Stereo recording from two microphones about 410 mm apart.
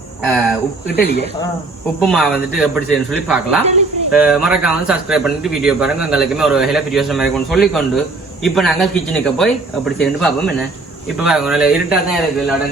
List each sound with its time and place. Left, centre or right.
0.3 s speech: centre
0.9 s speech: left
2.0 s speech: centre